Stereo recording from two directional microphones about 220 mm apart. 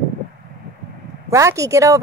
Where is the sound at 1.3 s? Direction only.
15° right (ahead or behind).